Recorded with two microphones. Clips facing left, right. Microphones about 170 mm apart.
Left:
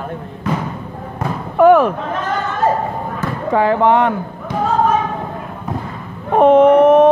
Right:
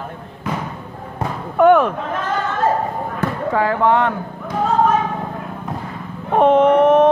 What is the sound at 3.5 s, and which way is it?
Speech, 20° left (ahead or behind).